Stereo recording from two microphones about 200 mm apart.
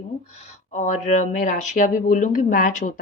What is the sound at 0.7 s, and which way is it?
Speech, 35° left (ahead or behind).